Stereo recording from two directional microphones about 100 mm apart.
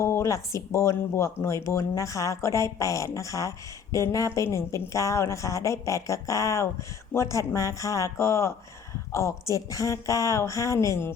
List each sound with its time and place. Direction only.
0.0 s a woman's voice: 30° left (ahead or behind)